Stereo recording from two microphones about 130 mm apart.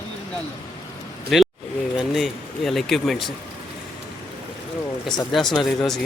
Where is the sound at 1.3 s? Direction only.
Centre (ahead or behind).